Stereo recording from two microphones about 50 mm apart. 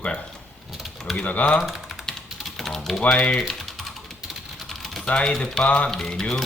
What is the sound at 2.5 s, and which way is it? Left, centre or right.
Typing, centre.